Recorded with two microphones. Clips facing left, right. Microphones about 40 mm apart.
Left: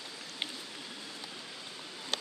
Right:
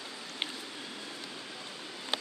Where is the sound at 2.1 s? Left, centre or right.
Centre.